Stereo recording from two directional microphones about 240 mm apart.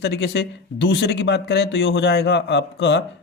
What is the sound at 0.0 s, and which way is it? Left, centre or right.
Speech, left.